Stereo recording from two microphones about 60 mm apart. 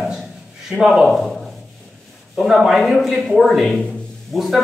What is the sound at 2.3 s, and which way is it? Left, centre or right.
A man's voice, centre.